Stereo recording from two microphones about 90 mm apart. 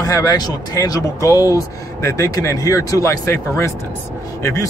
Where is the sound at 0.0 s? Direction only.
40° left (ahead or behind).